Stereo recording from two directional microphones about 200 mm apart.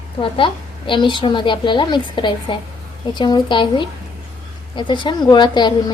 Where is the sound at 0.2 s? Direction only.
25° left (ahead or behind).